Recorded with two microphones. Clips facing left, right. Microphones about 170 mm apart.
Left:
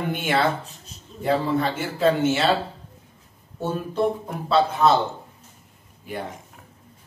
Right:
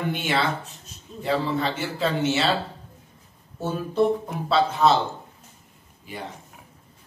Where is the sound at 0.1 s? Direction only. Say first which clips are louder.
Left 6 dB; 50° left (ahead or behind).